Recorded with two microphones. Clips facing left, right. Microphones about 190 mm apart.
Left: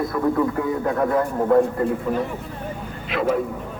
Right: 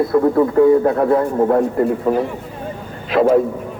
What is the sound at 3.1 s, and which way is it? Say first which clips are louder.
Speech: right 8 dB; 40° right (ahead or behind).